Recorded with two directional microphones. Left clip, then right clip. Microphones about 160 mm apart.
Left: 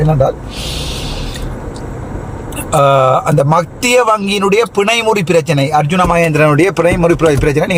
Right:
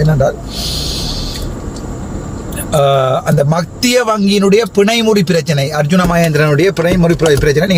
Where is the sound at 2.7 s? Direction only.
15° left (ahead or behind).